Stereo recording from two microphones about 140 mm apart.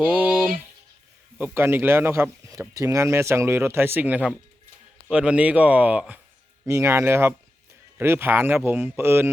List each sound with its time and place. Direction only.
0.0 s speech: 10° right (ahead or behind)